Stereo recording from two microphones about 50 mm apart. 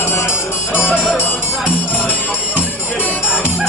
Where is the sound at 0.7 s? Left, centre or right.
Centre.